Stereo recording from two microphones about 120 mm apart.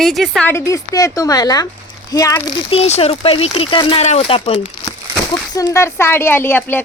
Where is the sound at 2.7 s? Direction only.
60° left (ahead or behind).